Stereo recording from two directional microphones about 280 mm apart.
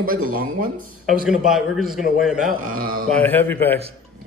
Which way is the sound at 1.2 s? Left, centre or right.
Centre.